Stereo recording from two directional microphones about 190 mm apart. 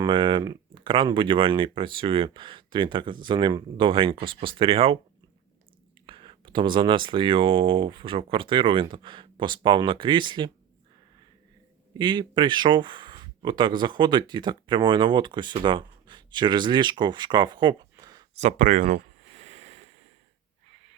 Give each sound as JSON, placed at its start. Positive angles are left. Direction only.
{"t": 0.0, "sound": "speech", "side_deg": -25}
{"t": 6.1, "sound": "speech", "side_deg": -25}
{"t": 11.9, "sound": "speech", "side_deg": -25}
{"t": 18.3, "sound": "a sound", "side_deg": -40}